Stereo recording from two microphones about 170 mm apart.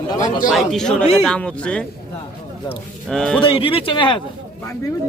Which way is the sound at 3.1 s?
5° left (ahead or behind).